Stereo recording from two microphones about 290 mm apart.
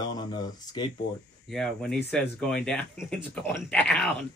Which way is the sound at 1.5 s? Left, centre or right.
Centre.